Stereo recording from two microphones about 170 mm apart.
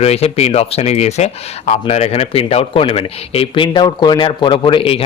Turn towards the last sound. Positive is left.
turn(degrees=30)  # may be behind; listen again after turning